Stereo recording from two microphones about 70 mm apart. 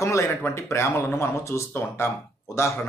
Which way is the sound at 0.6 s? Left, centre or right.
Left.